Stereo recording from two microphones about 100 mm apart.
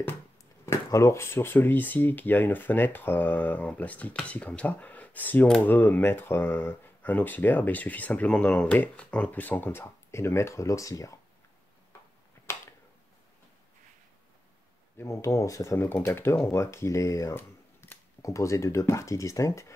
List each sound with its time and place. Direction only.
0.8 s speech: 30° left (ahead or behind)
15.0 s speech: 30° left (ahead or behind)